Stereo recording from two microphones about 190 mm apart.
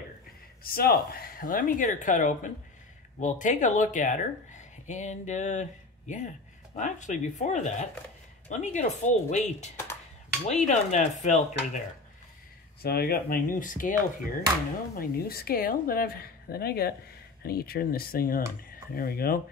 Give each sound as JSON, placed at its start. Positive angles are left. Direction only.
{"t": 0.7, "sound": "speech", "side_deg": 50}
{"t": 10.7, "sound": "speech", "side_deg": 40}
{"t": 12.8, "sound": "speech", "side_deg": 55}